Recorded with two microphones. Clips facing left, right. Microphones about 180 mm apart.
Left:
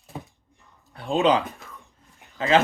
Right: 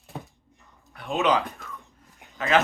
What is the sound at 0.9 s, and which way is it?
Speech, 30° left (ahead or behind).